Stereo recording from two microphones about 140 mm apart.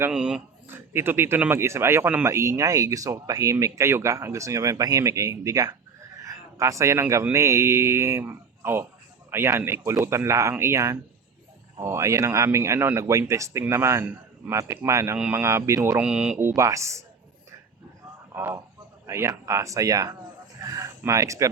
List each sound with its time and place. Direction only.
0.0 s speech: 5° right (ahead or behind)
16.0 s speech: 5° right (ahead or behind)
16.4 s speech: 20° right (ahead or behind)
18.3 s speech: 20° right (ahead or behind)